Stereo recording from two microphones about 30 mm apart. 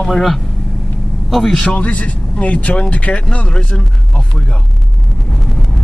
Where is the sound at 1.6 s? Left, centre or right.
Left.